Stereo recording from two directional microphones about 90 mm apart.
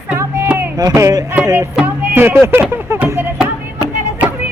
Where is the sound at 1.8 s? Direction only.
25° right (ahead or behind).